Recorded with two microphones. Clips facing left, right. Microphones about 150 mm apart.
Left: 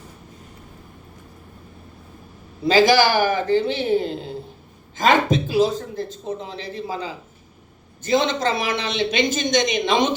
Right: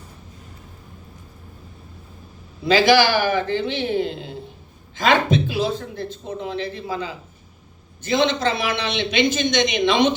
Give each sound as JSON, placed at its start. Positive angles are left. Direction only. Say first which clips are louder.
{"t": 2.6, "sound": "a man's voice", "louder": "even", "side_deg": 40}